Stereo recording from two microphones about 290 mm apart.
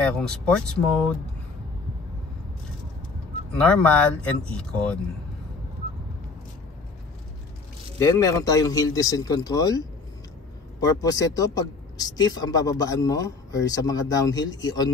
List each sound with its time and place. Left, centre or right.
0.2 s speech: centre
3.5 s speech: centre
8.0 s a man's voice: centre